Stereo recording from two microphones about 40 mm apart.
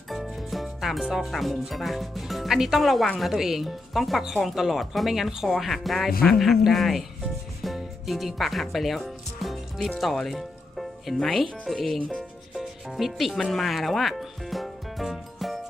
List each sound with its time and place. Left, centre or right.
0.1 s music: centre
1.2 s speech: centre
8.0 s speech: centre
10.0 s music: centre
11.2 s speech: centre
12.5 s music: centre